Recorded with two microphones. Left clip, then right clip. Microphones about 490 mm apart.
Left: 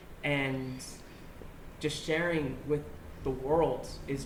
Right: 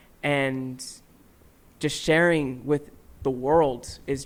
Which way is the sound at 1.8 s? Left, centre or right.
Right.